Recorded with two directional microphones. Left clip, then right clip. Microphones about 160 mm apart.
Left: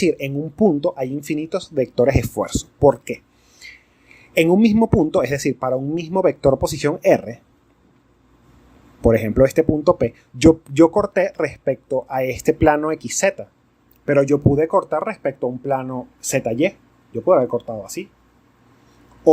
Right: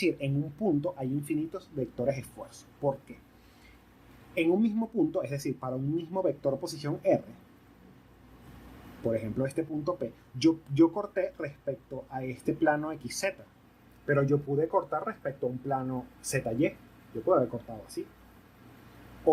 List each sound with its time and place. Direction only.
0.0 s speech: 45° left (ahead or behind)
4.4 s speech: 50° left (ahead or behind)
9.0 s speech: 55° left (ahead or behind)
14.0 s speech: 60° left (ahead or behind)